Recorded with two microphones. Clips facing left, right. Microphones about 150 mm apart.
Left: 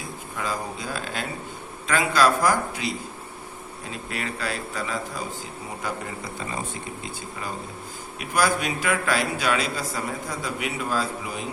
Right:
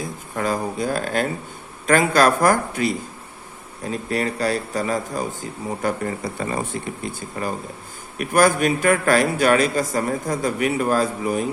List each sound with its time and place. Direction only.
0.3 s a man's voice: 50° right (ahead or behind)
3.9 s a man's voice: 40° right (ahead or behind)